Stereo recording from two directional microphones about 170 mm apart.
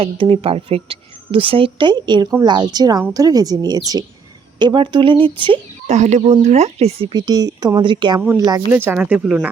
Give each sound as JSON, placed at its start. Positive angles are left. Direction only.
{"t": 0.0, "sound": "a woman's voice", "side_deg": -30}
{"t": 5.9, "sound": "speech", "side_deg": -45}
{"t": 7.1, "sound": "a woman's voice", "side_deg": -25}
{"t": 8.4, "sound": "speech", "side_deg": -15}